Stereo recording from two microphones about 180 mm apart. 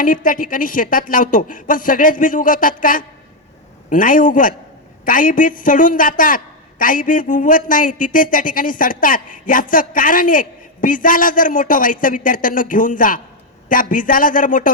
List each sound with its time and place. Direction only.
0.0 s a man's voice: 50° left (ahead or behind)